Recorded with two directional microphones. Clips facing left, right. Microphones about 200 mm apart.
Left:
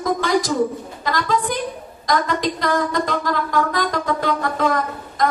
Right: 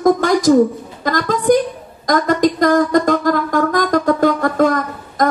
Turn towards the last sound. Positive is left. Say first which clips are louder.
# right 3 dB
turn(degrees=-45)  # may be behind; listen again after turning